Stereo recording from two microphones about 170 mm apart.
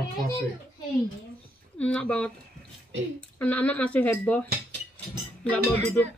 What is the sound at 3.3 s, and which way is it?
A woman's voice, 10° left (ahead or behind).